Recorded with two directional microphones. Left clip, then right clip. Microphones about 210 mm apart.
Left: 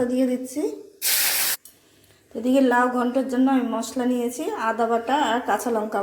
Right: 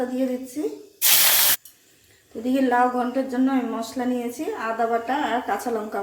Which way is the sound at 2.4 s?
25° left (ahead or behind).